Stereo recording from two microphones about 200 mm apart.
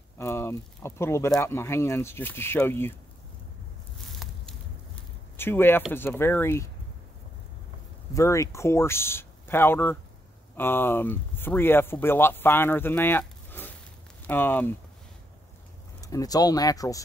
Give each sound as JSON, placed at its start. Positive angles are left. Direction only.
{"t": 0.2, "sound": "speech", "side_deg": 15}
{"t": 4.1, "sound": "a sound", "side_deg": 0}
{"t": 5.4, "sound": "speech", "side_deg": 10}
{"t": 8.1, "sound": "speech", "side_deg": 15}
{"t": 16.0, "sound": "speech", "side_deg": 15}